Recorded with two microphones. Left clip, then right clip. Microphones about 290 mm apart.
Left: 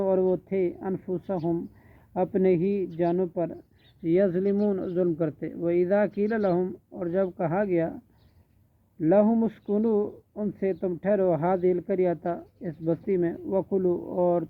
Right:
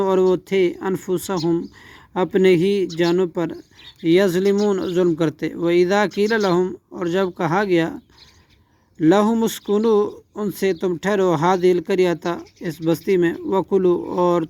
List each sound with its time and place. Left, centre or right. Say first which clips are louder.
0.0 s speech: right 7 dB; right
9.0 s speech: right 5 dB; right
13.9 s speech: right 8 dB; right